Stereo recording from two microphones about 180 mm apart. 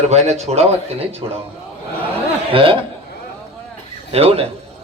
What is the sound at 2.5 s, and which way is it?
Speech, 30° right (ahead or behind).